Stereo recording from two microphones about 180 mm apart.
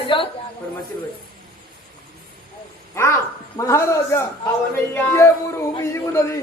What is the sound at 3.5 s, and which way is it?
Speech, 15° left (ahead or behind).